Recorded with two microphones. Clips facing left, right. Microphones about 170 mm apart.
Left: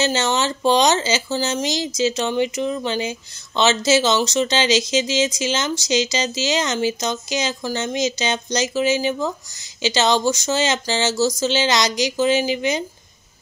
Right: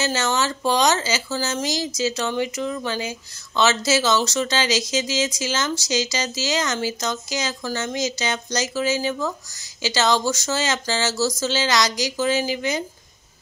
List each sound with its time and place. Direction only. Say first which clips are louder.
0.0 s speech: left 3 dB; 20° left (ahead or behind)